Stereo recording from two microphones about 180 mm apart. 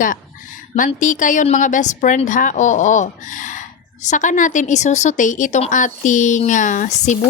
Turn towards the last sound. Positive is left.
turn(degrees=40)  # may be behind; listen again after turning